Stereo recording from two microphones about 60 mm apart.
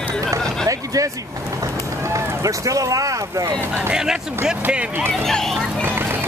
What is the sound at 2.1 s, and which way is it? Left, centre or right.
Speech, right.